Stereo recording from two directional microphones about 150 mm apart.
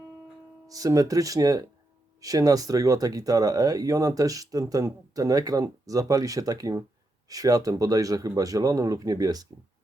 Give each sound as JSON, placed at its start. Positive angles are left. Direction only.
{"t": 0.7, "sound": "speech", "side_deg": -25}